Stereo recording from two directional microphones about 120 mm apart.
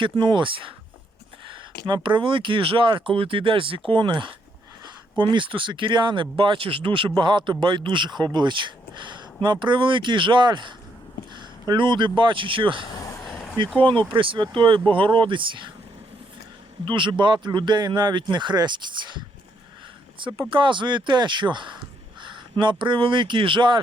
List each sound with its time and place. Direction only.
0.0 s speech: 40° right (ahead or behind)
12.9 s vehicle: 30° left (ahead or behind)
14.1 s speech: 45° right (ahead or behind)
16.8 s speech: 40° right (ahead or behind)
20.1 s speech: 45° right (ahead or behind)